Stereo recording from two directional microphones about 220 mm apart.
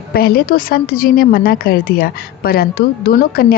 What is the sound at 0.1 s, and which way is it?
A woman's voice, 45° left (ahead or behind).